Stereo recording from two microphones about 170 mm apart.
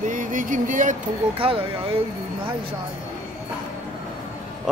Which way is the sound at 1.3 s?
30° right (ahead or behind).